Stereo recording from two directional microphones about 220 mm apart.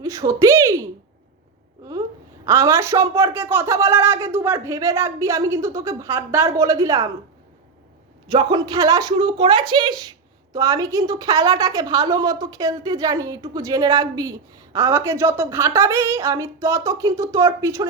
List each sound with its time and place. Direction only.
0.0 s a woman's voice: 15° right (ahead or behind)
2.5 s a woman's voice: 15° right (ahead or behind)
8.3 s a woman's voice: 20° right (ahead or behind)